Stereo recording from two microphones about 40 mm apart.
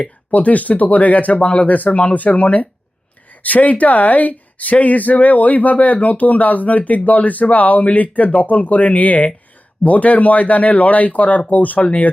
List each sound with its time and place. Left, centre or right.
0.0 s speech: left